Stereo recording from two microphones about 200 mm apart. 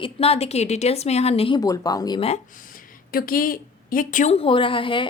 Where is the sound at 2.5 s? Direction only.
45° left (ahead or behind).